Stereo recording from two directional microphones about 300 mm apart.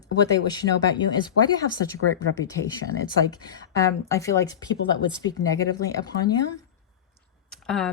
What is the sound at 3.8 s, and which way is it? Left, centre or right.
Speech, centre.